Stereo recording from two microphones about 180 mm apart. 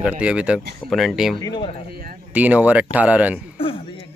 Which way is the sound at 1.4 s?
25° left (ahead or behind).